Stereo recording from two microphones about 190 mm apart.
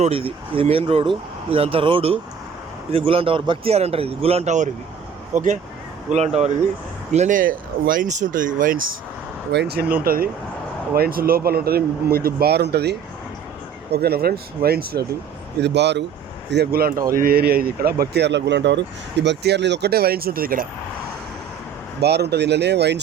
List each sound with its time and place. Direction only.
0.0 s speech: 30° right (ahead or behind)
6.1 s speech: 35° right (ahead or behind)
9.5 s speech: 60° right (ahead or behind)
10.0 s speech: 50° right (ahead or behind)
15.6 s speech: 65° right (ahead or behind)
22.0 s speech: 60° right (ahead or behind)